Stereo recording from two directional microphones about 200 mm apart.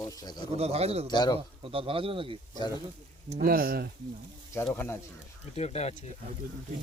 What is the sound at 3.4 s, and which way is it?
Speech, 50° right (ahead or behind).